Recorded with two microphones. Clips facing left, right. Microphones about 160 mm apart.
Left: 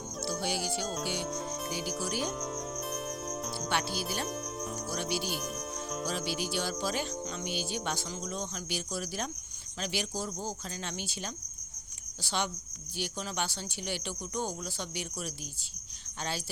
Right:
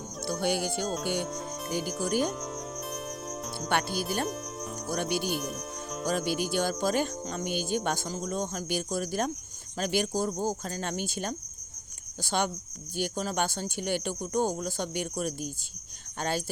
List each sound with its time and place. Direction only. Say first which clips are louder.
0.3 s music: right 5 dB; 55° right (ahead or behind)
1.0 s speech: right 4 dB; 50° right (ahead or behind)
1.3 s music: even; centre (ahead or behind)
2.0 s music: right 8 dB; 50° right (ahead or behind)
2.3 s cricket: even; centre (ahead or behind)
4.3 s speech: right 1 dB; centre (ahead or behind)
4.9 s music: right 6 dB; 50° right (ahead or behind)
5.4 s speech: right 2 dB; centre (ahead or behind)
6.1 s music: right 8 dB; 50° right (ahead or behind)